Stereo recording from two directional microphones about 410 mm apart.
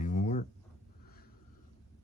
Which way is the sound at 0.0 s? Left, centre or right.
Centre.